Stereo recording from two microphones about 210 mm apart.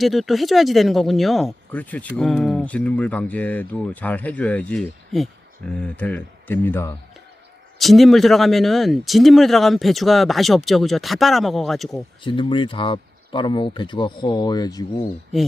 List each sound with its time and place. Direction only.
0.0 s speech: centre (ahead or behind)
12.2 s speech: 25° left (ahead or behind)